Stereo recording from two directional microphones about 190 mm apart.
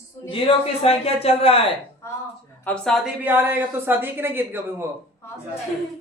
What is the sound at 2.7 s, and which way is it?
A woman's voice, centre (ahead or behind).